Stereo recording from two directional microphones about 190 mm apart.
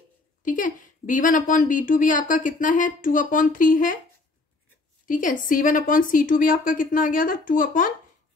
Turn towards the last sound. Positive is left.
turn(degrees=45)  # may be behind; listen again after turning